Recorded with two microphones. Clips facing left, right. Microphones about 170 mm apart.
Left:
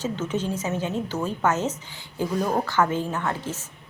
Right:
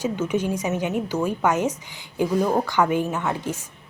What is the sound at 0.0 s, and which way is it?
Speech, 10° right (ahead or behind).